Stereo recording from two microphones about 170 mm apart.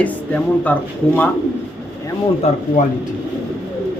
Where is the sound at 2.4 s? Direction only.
40° left (ahead or behind).